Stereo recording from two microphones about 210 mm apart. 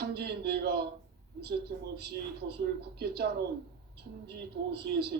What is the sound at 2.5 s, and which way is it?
Speech, 50° right (ahead or behind).